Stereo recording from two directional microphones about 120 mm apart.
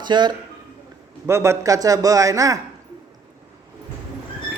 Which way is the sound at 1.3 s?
25° right (ahead or behind).